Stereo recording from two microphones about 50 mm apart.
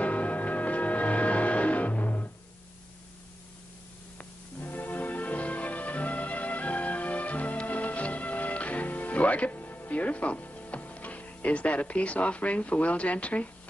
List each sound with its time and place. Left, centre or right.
0.0 s music: left
4.2 s music: left